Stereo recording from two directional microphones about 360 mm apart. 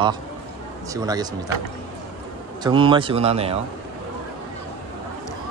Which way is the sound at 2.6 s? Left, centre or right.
Centre.